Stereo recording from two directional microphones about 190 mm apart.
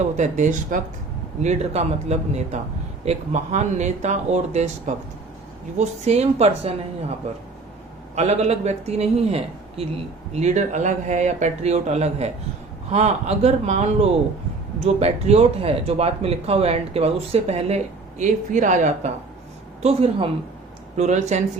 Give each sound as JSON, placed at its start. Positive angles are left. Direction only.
{"t": 0.0, "sound": "a man's voice", "side_deg": -40}
{"t": 8.1, "sound": "a man's voice", "side_deg": -35}